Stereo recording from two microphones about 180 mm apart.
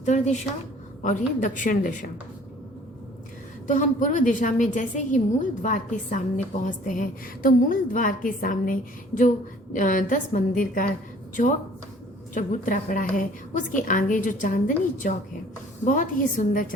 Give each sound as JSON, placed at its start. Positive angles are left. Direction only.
{"t": 0.0, "sound": "a woman's voice", "side_deg": 40}
{"t": 3.7, "sound": "a woman's voice", "side_deg": 45}
{"t": 12.3, "sound": "a woman's voice", "side_deg": 45}
{"t": 15.8, "sound": "a woman's voice", "side_deg": 45}